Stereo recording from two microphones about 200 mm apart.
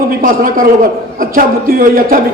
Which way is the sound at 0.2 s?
45° right (ahead or behind).